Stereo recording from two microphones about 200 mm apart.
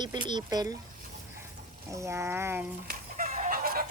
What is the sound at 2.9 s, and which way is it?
Chicken, 45° right (ahead or behind).